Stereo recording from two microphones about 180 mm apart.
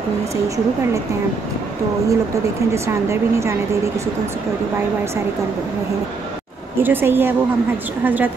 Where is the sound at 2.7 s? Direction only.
15° right (ahead or behind).